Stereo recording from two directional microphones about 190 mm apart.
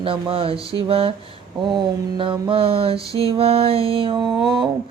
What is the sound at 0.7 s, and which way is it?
Mantra, 30° right (ahead or behind).